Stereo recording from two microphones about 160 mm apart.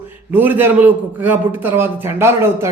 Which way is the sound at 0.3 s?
10° right (ahead or behind).